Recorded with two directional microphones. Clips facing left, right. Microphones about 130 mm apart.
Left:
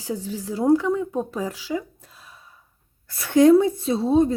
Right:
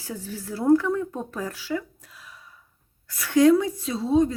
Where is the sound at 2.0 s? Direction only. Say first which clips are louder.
Even; 30° left (ahead or behind).